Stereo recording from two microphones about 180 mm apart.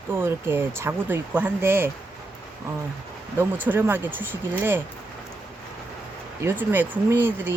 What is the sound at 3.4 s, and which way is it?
Speech, 10° right (ahead or behind).